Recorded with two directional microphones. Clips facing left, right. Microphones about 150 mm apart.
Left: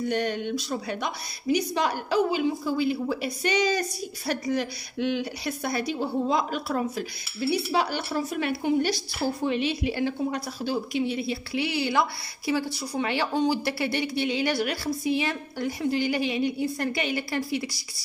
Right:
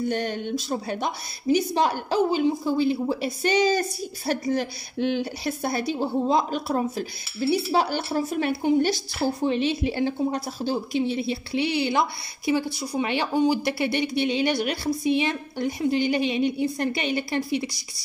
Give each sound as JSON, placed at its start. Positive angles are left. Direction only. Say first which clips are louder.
{"t": 0.7, "sound": "a woman's voice", "louder": "right 3 dB", "side_deg": -30}